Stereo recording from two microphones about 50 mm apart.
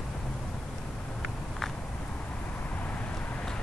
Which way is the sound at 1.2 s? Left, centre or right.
Centre.